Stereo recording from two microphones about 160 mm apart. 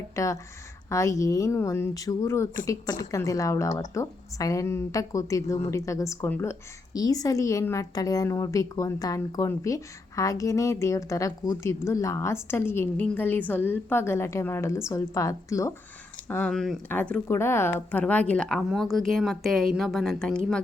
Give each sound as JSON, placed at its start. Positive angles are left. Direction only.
{"t": 0.2, "sound": "speech", "side_deg": 20}
{"t": 16.5, "sound": "speech", "side_deg": 0}